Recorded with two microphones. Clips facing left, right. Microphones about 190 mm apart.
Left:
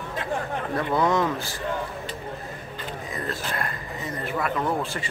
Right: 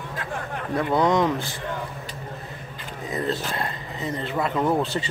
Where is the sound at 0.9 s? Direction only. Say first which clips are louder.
Right 2 dB; 20° right (ahead or behind).